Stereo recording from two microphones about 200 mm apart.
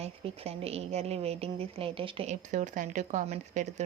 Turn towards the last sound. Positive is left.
turn(degrees=-35)  # may be behind; listen again after turning